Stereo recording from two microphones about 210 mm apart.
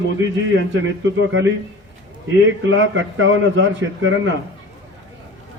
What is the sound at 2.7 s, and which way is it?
A man's voice, 65° right (ahead or behind).